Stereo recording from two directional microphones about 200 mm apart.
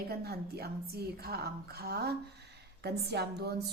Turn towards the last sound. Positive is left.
turn(degrees=-55)  # may be behind; listen again after turning